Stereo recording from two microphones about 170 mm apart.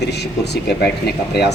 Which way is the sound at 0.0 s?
80° left.